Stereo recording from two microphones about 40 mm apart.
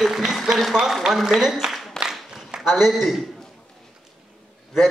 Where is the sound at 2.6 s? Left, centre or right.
Centre.